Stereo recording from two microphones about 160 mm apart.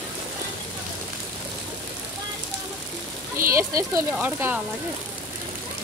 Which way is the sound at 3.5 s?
20° right (ahead or behind).